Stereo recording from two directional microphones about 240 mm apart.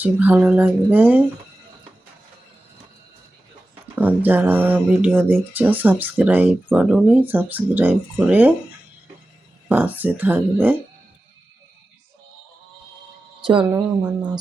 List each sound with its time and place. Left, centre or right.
0.0 s speech: centre
3.9 s speech: centre
9.6 s speech: centre
13.4 s speech: right
13.7 s speech: centre